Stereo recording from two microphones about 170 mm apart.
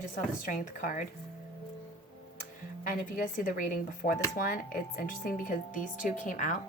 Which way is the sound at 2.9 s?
55° left (ahead or behind).